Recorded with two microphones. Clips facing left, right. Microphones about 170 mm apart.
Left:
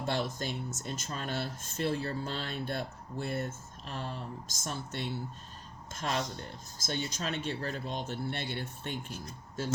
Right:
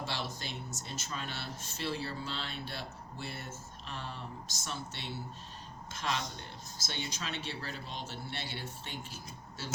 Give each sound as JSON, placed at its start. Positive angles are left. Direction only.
{"t": 0.0, "sound": "speech", "side_deg": 50}